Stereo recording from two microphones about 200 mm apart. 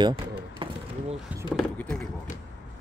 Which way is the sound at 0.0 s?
25° right (ahead or behind).